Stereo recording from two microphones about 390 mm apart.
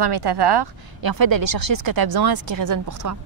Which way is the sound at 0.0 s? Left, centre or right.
Right.